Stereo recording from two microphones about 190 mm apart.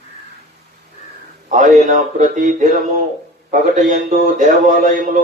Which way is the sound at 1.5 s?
40° right (ahead or behind).